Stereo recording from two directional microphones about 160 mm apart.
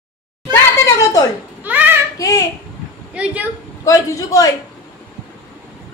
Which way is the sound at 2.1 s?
20° left (ahead or behind).